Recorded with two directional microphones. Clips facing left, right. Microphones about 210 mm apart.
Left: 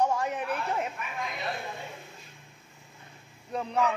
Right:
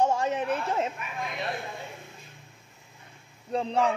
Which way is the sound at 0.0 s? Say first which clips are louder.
Right 3 dB; 25° right (ahead or behind).